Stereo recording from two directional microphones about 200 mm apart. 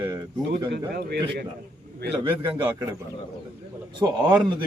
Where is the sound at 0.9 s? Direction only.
55° right (ahead or behind).